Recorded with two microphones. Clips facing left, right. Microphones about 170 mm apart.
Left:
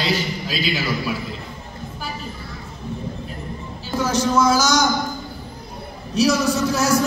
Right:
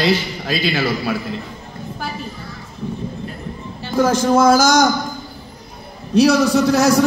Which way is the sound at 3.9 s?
55° right (ahead or behind).